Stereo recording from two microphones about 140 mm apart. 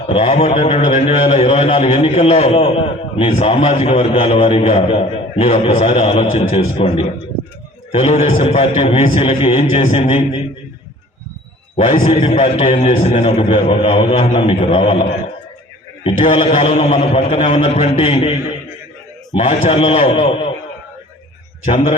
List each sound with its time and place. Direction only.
0.1 s a man's voice: 45° left (ahead or behind)
11.8 s a man's voice: 45° left (ahead or behind)
16.0 s a man's voice: 40° left (ahead or behind)
19.4 s a man's voice: 45° left (ahead or behind)
21.6 s a man's voice: 45° left (ahead or behind)